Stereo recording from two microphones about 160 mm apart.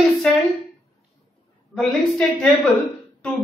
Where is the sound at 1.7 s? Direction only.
5° left (ahead or behind).